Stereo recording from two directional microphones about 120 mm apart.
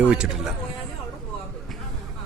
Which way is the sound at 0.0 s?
10° right (ahead or behind).